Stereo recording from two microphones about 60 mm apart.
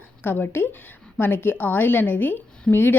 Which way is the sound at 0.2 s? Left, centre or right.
Left.